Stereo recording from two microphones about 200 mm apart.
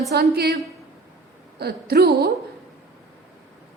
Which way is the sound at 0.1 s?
55° right (ahead or behind).